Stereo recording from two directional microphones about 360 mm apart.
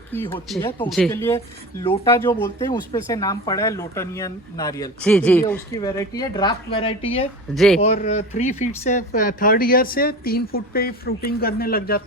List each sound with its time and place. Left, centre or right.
0.1 s speech: centre
7.5 s speech: centre
7.8 s speech: centre